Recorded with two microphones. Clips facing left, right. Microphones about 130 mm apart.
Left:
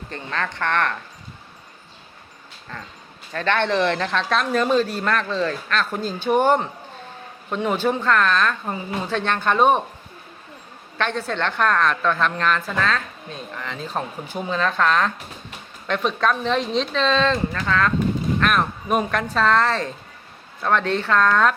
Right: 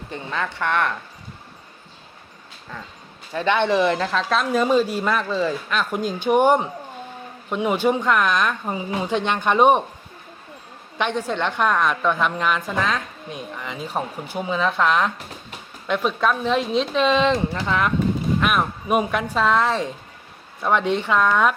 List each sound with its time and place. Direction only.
0.1 s a woman's voice: 10° right (ahead or behind)
3.3 s a woman's voice: 15° right (ahead or behind)
10.9 s a woman's voice: 15° right (ahead or behind)